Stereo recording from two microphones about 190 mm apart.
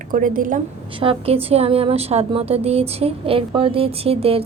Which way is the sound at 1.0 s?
30° right (ahead or behind).